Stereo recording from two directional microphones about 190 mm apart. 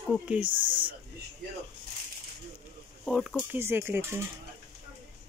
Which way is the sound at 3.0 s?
Centre (ahead or behind).